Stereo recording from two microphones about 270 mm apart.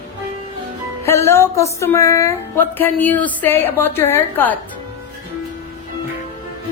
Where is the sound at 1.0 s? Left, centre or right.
Centre.